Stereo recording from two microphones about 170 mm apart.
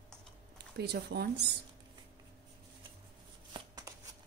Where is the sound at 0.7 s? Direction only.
70° right (ahead or behind).